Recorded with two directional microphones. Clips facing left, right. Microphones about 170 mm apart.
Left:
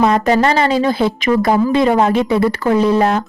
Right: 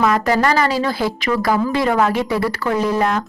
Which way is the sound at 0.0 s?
25° left (ahead or behind).